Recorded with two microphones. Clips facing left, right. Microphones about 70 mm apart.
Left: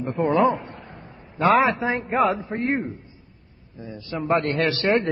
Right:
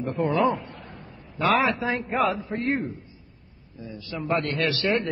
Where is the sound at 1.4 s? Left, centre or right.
Left.